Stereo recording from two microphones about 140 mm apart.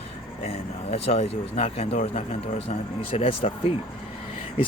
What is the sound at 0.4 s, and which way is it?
Speech, 45° left (ahead or behind).